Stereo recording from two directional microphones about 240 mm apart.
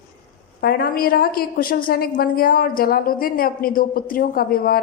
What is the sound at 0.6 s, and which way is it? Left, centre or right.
Speech, left.